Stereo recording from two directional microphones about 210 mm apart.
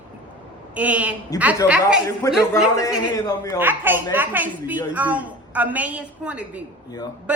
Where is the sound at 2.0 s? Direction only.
15° left (ahead or behind).